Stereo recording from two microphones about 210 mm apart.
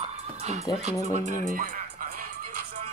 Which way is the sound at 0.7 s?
20° left (ahead or behind).